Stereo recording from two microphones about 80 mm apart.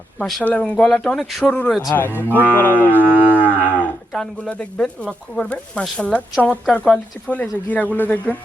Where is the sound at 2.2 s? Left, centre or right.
Left.